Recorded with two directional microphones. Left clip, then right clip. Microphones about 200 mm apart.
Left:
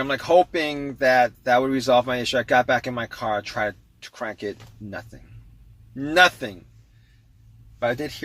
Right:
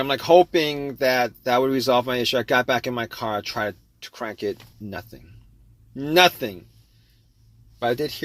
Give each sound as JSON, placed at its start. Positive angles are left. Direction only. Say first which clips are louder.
{"t": 0.0, "sound": "speech", "louder": "right 2 dB", "side_deg": -35}
{"t": 7.8, "sound": "speech", "louder": "right 1 dB", "side_deg": -35}